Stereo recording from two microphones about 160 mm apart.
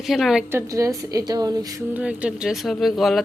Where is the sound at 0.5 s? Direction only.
20° right (ahead or behind).